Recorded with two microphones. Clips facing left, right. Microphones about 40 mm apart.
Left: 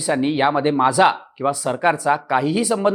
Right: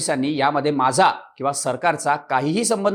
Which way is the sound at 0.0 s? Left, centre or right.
Centre.